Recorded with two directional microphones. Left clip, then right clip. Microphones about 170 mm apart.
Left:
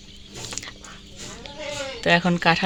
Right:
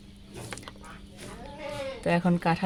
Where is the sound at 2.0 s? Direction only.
Centre (ahead or behind).